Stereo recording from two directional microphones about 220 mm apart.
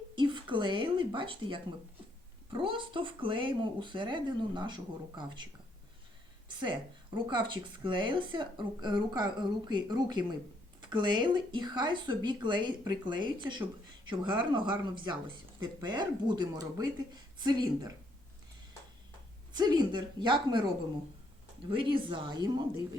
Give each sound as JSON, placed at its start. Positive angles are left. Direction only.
{"t": 0.2, "sound": "a woman's voice", "side_deg": -20}
{"t": 6.5, "sound": "a woman's voice", "side_deg": -20}
{"t": 15.6, "sound": "a woman's voice", "side_deg": -20}
{"t": 19.5, "sound": "a woman's voice", "side_deg": -20}
{"t": 21.7, "sound": "a woman's voice", "side_deg": -25}